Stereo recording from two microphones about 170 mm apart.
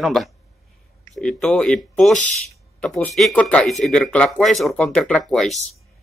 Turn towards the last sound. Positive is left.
turn(degrees=0)  # may be behind; listen again after turning